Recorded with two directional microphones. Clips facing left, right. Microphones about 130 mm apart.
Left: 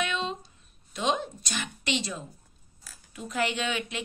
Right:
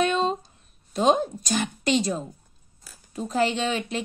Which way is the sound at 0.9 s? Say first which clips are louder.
Right 8 dB; 40° right (ahead or behind).